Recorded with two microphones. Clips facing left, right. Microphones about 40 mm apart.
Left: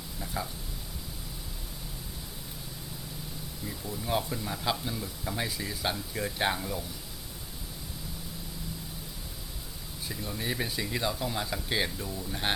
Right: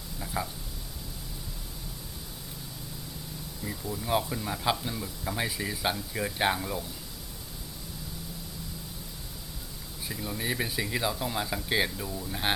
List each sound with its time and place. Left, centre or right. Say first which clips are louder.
0.4 s speech: right 2 dB; centre
3.6 s speech: right 3 dB; centre
10.1 s speech: right 2 dB; centre